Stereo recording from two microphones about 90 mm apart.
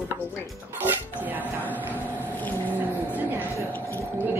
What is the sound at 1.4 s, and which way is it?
Speech, 20° left (ahead or behind).